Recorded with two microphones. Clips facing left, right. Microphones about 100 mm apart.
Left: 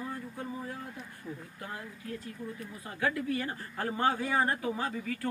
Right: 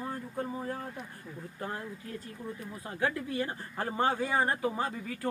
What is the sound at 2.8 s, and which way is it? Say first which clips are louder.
Speech: left 1 dB; 25° right (ahead or behind).